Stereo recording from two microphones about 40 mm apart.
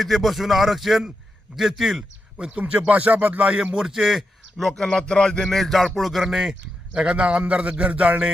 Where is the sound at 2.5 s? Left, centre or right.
Right.